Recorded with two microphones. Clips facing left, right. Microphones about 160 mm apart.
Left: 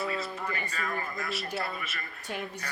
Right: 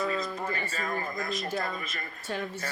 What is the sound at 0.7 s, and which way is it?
Speech, 35° right (ahead or behind).